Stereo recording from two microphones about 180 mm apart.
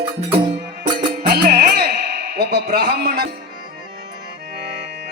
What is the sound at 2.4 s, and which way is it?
Speech, 65° right (ahead or behind).